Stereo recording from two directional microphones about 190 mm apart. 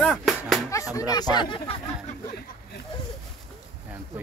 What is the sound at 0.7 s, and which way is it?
Speech, 15° left (ahead or behind).